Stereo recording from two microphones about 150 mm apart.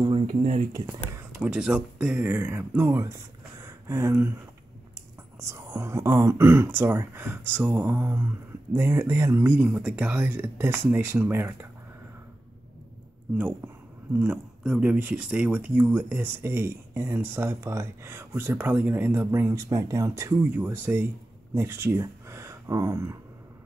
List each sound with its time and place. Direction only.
0.0 s a sound: 30° right (ahead or behind)
0.4 s speech: 60° right (ahead or behind)
0.8 s speech: 10° right (ahead or behind)
5.4 s speech: 15° right (ahead or behind)
14.1 s speech: 10° right (ahead or behind)